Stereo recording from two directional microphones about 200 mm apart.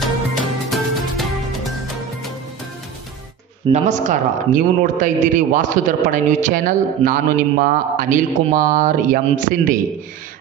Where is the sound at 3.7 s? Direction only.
40° right (ahead or behind).